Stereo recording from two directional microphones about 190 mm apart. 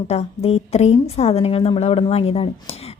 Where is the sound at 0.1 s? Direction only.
35° left (ahead or behind).